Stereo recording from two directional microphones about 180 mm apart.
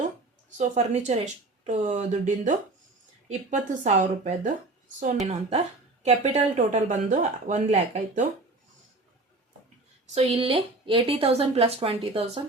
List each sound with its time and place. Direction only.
0.5 s a woman's voice: 40° right (ahead or behind)
10.2 s a woman's voice: 30° right (ahead or behind)